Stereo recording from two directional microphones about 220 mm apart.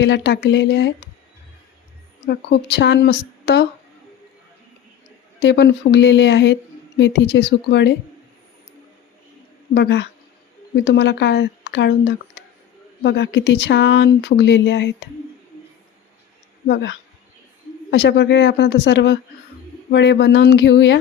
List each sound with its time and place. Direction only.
0.0 s speech: 50° left (ahead or behind)
2.2 s speech: 50° left (ahead or behind)
5.4 s speech: 50° left (ahead or behind)
9.7 s speech: 50° left (ahead or behind)
16.6 s speech: 50° left (ahead or behind)